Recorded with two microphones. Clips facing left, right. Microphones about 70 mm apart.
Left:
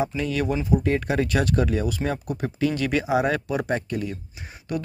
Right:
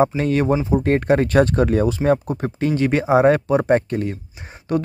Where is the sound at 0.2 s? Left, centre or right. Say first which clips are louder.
Right 7 dB; right.